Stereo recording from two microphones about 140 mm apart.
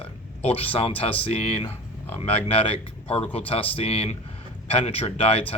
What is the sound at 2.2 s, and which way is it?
Speech, 45° left (ahead or behind).